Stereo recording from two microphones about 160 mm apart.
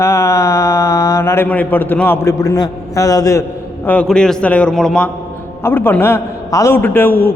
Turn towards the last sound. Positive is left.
turn(degrees=70)  # may be behind; listen again after turning